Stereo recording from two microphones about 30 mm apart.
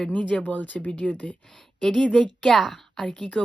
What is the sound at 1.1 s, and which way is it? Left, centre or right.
Speech, left.